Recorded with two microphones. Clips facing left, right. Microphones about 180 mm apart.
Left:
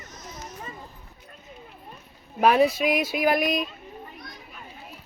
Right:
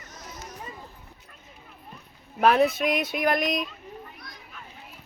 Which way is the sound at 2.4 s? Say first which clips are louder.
Left 1 dB; 5° left (ahead or behind).